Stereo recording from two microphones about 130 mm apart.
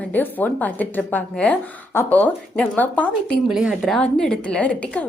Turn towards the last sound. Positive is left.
turn(degrees=10)  # may be behind; listen again after turning